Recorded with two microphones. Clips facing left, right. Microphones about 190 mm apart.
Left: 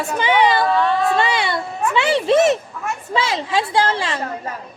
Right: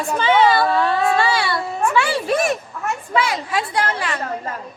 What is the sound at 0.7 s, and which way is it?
Speech, 5° right (ahead or behind).